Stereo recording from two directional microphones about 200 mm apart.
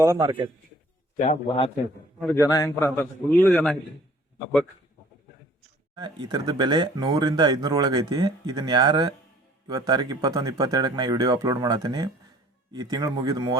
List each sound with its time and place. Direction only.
0.0 s speech: 20° right (ahead or behind)
1.2 s a man's voice: 30° left (ahead or behind)
2.2 s a man's voice: 15° left (ahead or behind)
6.0 s speech: 20° right (ahead or behind)